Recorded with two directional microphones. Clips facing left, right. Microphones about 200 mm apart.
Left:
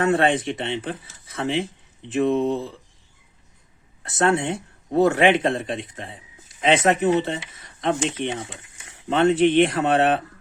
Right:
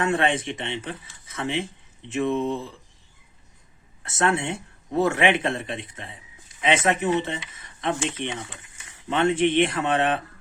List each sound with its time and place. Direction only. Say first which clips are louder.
0.0 s speech: left 4 dB; 40° left (ahead or behind)
4.0 s speech: left 3 dB; 35° left (ahead or behind)